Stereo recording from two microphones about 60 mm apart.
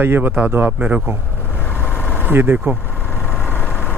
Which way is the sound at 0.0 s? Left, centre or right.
Right.